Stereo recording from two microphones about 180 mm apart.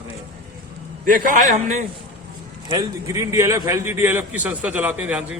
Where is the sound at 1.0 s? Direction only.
45° right (ahead or behind).